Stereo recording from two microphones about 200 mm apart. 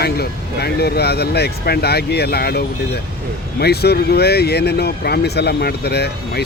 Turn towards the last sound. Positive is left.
turn(degrees=55)  # may be behind; listen again after turning